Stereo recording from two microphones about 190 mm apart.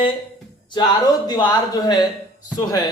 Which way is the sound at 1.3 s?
20° left (ahead or behind).